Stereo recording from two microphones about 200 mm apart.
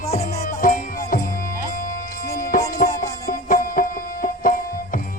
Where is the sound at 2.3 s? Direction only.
45° left (ahead or behind).